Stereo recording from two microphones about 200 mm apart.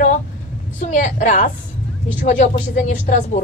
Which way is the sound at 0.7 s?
40° left (ahead or behind).